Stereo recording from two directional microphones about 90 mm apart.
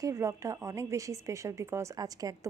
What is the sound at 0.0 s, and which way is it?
A woman's voice, 35° right (ahead or behind).